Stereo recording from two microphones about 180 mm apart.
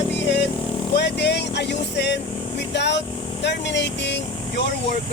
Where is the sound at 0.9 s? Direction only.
70° left (ahead or behind).